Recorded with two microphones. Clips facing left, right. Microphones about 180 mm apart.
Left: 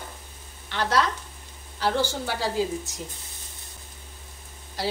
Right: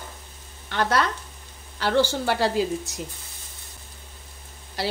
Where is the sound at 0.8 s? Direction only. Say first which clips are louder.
Right 1 dB; 55° right (ahead or behind).